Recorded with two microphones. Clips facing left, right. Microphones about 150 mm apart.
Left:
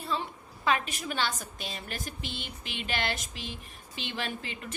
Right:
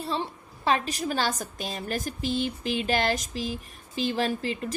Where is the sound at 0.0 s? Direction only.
35° right (ahead or behind).